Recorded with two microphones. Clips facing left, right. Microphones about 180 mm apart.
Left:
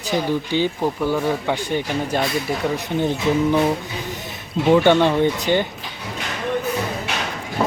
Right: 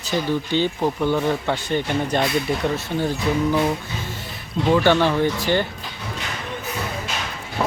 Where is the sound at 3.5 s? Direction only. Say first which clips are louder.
Left 2 dB; 10° left (ahead or behind).